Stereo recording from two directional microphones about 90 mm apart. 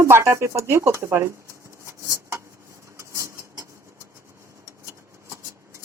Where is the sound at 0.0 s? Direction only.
30° right (ahead or behind).